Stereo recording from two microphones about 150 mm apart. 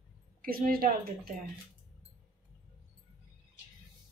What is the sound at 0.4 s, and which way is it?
Speech, 75° right (ahead or behind).